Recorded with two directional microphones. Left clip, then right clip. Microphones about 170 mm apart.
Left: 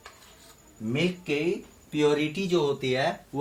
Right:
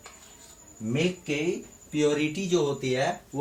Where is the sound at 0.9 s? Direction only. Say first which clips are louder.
Even; 20° left (ahead or behind).